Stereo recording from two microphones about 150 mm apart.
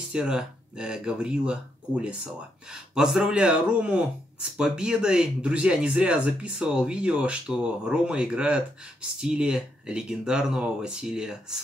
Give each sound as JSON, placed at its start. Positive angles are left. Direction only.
{"t": 0.1, "sound": "speech", "side_deg": -5}